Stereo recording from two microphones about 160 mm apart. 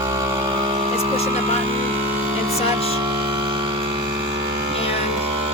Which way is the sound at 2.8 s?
35° right (ahead or behind).